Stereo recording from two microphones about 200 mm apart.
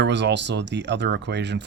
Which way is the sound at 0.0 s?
60° right (ahead or behind).